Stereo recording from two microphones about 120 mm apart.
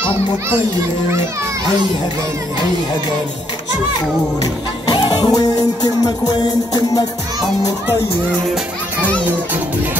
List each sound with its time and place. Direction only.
4.8 s music: 40° left (ahead or behind)